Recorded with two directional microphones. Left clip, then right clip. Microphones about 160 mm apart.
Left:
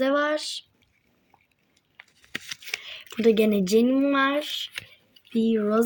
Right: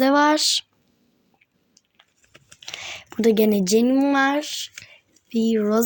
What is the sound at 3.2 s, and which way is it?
A woman's voice, 50° right (ahead or behind).